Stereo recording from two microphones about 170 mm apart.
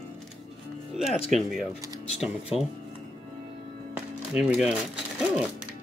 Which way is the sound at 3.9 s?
5° right (ahead or behind).